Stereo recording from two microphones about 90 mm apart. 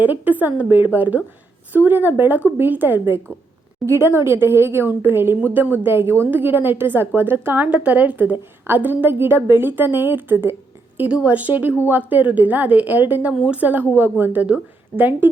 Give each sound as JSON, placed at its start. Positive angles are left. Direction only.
{"t": 0.0, "sound": "a woman's voice", "side_deg": -20}